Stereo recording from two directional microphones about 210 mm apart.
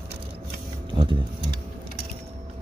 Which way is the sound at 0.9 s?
20° right (ahead or behind).